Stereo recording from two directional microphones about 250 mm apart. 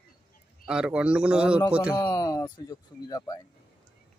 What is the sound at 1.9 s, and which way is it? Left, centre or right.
Speech, centre.